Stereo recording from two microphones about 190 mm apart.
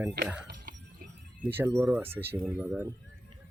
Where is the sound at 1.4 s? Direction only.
10° right (ahead or behind).